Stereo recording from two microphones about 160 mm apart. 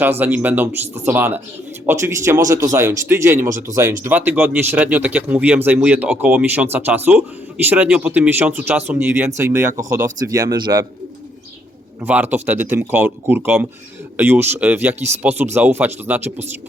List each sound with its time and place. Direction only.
0.0 s speech: 10° right (ahead or behind)
11.9 s speech: 10° right (ahead or behind)